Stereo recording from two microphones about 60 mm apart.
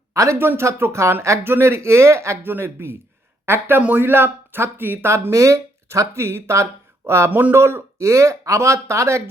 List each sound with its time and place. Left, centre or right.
0.1 s a sound: right
0.3 s speech: right
2.4 s speech: right
3.8 s speech: right
5.3 s speech: right
7.3 s speech: right
7.5 s speech: right